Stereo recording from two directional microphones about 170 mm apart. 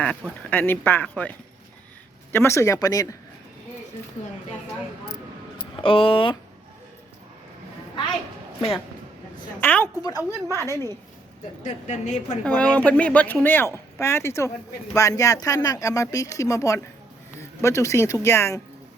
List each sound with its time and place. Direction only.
0.0 s speech: 5° left (ahead or behind); by 3.2 s 20° left (ahead or behind)
5.8 s speech: 30° left (ahead or behind)
9.6 s speech: 10° left (ahead or behind)
10.2 s a woman's voice: 15° right (ahead or behind)
11.6 s a woman's voice: 45° left (ahead or behind)
12.5 s speech: 5° left (ahead or behind)